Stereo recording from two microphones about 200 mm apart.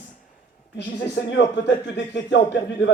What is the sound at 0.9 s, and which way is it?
A man's voice, 60° left (ahead or behind).